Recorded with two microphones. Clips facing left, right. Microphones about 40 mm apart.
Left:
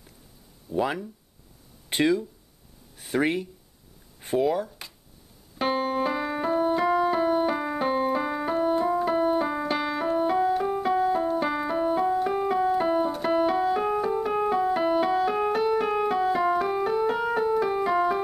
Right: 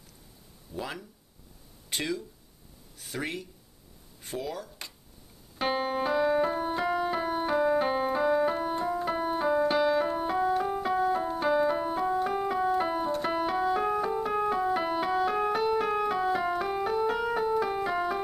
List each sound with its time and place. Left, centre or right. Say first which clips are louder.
0.7 s speech: left 10 dB; left
4.6 s a sound: left 1 dB; centre
5.6 s music: left 3 dB; centre